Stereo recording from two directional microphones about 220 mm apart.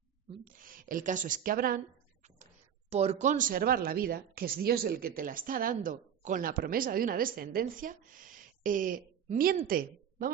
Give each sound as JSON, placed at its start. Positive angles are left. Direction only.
{"t": 0.4, "sound": "speech", "side_deg": -40}
{"t": 2.9, "sound": "a woman's voice", "side_deg": -30}